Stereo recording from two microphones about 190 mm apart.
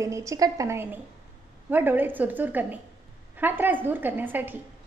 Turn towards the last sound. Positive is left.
turn(degrees=-10)  # may be behind; listen again after turning